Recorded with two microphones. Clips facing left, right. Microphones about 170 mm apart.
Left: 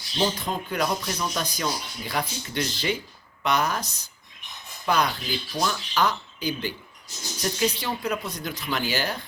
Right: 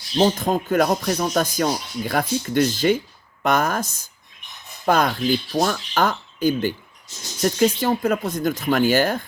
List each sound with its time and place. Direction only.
0.2 s speech: 45° right (ahead or behind)